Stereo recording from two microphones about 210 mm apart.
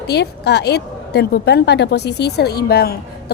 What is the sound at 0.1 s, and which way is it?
A woman's voice, 50° left (ahead or behind).